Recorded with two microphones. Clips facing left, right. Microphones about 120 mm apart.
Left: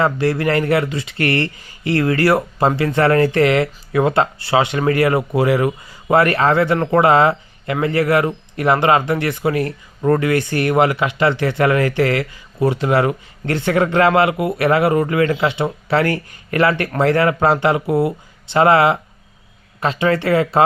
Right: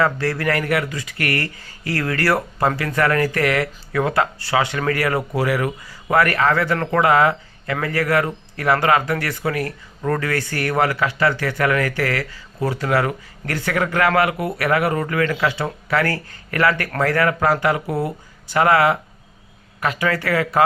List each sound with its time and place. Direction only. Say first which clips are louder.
0.0 s a man's voice: left 3 dB; 20° left (ahead or behind)